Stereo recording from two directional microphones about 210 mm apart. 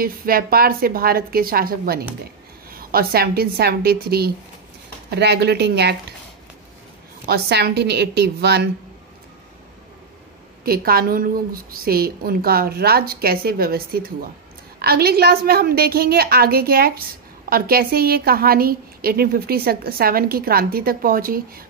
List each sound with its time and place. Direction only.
0.0 s a woman's voice: 45° right (ahead or behind)
7.2 s a woman's voice: 50° right (ahead or behind)
10.6 s a woman's voice: 45° right (ahead or behind)